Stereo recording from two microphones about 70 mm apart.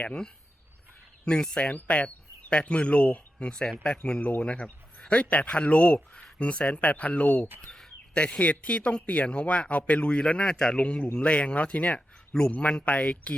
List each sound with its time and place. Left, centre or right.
0.0 s speech: centre
7.6 s speech: centre